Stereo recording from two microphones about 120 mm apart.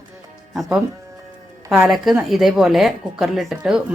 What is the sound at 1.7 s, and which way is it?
A woman's voice, 5° right (ahead or behind).